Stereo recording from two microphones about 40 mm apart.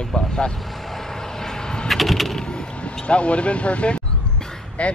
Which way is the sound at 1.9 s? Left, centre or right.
Centre.